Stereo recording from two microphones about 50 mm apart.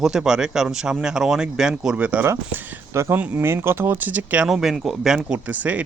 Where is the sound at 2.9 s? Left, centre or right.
Right.